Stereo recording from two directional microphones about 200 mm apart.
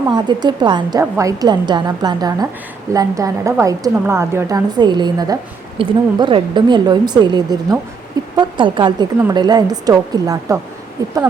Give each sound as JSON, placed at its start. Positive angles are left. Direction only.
{"t": 0.1, "sound": "a woman's voice", "side_deg": -20}